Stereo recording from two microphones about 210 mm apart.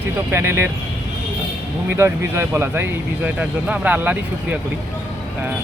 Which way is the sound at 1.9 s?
10° right (ahead or behind).